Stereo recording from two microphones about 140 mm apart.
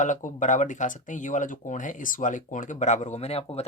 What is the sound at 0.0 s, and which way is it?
Speech, 65° left (ahead or behind).